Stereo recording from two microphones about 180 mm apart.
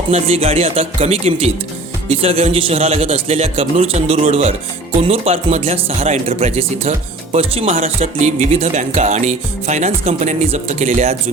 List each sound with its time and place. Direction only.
0.1 s speech: 35° right (ahead or behind)